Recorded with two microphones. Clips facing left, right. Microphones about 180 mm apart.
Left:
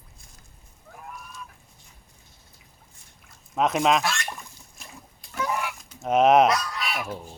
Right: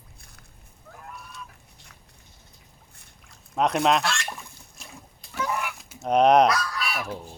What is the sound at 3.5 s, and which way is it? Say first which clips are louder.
Fowl: even; centre (ahead or behind).